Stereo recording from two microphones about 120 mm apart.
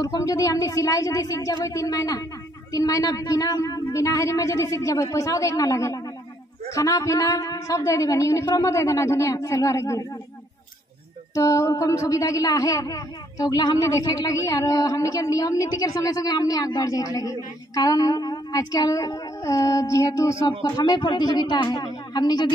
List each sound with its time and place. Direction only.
0.0 s speech: 25° left (ahead or behind)
11.3 s speech: 25° left (ahead or behind)